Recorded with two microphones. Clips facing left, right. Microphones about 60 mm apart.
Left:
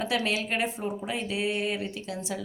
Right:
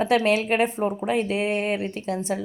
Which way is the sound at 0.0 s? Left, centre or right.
Right.